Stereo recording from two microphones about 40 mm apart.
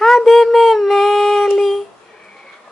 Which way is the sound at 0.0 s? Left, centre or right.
Centre.